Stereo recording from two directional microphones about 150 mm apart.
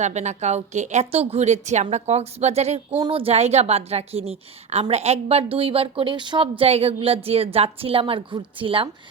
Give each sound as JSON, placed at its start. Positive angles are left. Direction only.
{"t": 0.0, "sound": "a woman's voice", "side_deg": -50}